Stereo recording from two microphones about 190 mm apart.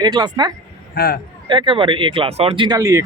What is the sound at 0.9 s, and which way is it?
Speech, 55° left (ahead or behind).